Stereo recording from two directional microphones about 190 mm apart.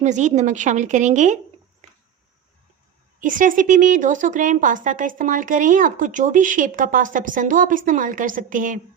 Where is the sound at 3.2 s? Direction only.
45° right (ahead or behind).